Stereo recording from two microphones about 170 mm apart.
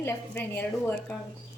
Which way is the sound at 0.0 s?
10° left (ahead or behind).